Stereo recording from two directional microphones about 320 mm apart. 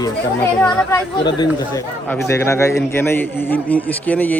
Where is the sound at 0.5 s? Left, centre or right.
Centre.